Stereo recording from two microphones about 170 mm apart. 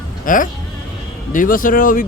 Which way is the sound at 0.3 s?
50° left (ahead or behind).